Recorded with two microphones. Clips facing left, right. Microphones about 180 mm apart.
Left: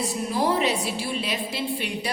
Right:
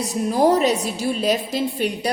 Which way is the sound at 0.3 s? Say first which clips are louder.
Right 7 dB; 45° right (ahead or behind).